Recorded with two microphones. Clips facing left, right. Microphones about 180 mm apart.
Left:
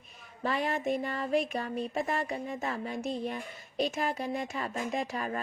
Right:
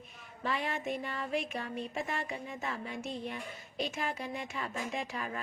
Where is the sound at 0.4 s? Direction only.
40° left (ahead or behind).